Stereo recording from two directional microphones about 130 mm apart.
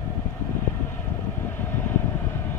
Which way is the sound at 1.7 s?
20° left (ahead or behind).